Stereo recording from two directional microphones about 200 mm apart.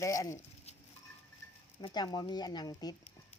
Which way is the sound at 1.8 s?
20° left (ahead or behind).